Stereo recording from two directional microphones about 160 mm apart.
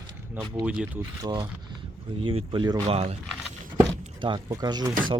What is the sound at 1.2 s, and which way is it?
Speech, 25° right (ahead or behind).